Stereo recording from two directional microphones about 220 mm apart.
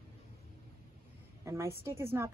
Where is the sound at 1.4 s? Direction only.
10° right (ahead or behind).